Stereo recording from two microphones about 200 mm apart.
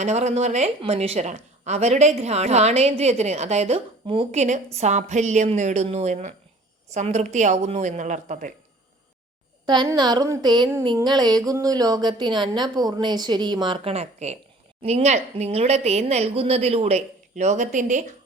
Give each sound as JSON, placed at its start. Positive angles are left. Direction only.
{"t": 0.0, "sound": "a woman's voice", "side_deg": -35}
{"t": 9.6, "sound": "a woman's voice", "side_deg": -20}